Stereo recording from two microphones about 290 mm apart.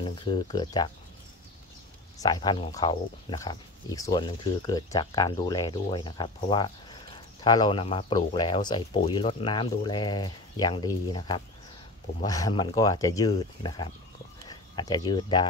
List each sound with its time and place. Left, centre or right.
0.0 s speech: centre
2.1 s speech: centre